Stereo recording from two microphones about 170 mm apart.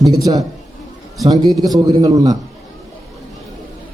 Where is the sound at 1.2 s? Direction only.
20° right (ahead or behind).